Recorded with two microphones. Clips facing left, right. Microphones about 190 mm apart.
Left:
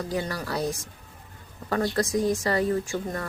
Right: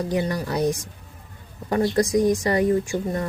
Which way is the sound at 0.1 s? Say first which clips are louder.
Right 5 dB; 20° right (ahead or behind).